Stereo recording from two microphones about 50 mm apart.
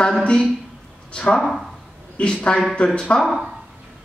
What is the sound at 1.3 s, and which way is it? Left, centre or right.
Speech, centre.